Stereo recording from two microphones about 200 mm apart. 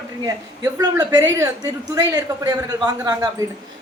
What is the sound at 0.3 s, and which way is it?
A woman's voice, 20° right (ahead or behind).